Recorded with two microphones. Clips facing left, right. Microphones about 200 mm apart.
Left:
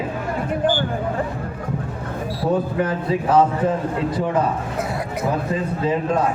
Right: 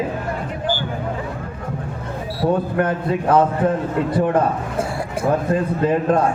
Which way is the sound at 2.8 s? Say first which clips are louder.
Right 1 dB; 55° right (ahead or behind).